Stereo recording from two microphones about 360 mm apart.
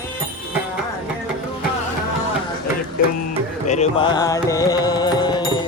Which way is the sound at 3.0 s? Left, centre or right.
Left.